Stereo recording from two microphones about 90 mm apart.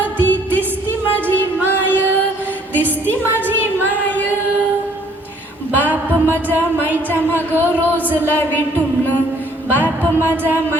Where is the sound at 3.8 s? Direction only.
20° left (ahead or behind).